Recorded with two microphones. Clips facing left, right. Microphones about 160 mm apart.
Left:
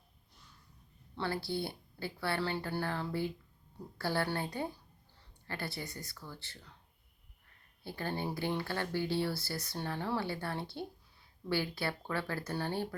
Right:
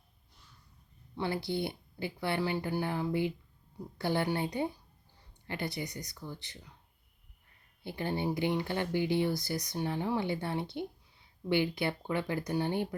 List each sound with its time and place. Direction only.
1.1 s speech: 15° right (ahead or behind)
7.9 s speech: 20° right (ahead or behind)